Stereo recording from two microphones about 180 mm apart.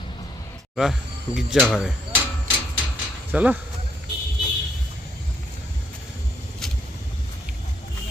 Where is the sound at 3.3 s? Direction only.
10° right (ahead or behind).